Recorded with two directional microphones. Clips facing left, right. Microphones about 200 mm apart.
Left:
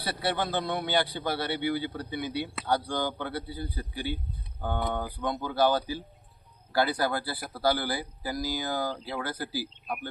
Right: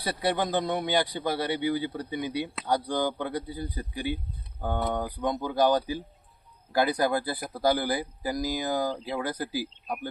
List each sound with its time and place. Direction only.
0.0 s a man's voice: 15° right (ahead or behind)